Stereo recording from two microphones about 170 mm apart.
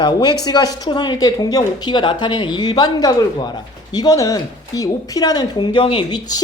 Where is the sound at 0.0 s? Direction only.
25° left (ahead or behind).